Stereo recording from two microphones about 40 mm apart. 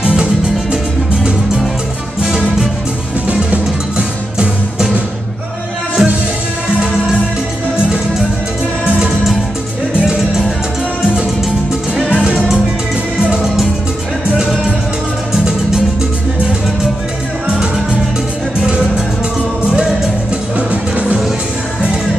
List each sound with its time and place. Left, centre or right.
0.0 s music: right
3.9 s music: right
6.0 s music: centre
12.2 s music: right
20.5 s music: right